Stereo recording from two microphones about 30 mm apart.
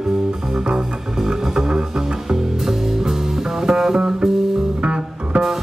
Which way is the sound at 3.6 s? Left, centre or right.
Right.